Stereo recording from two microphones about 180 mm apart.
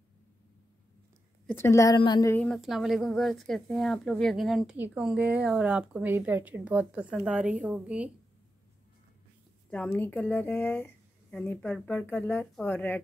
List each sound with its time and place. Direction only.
1.5 s speech: 15° left (ahead or behind)
2.0 s a sound: 25° left (ahead or behind)
2.3 s speech: 5° left (ahead or behind)
9.7 s a woman's voice: 10° left (ahead or behind)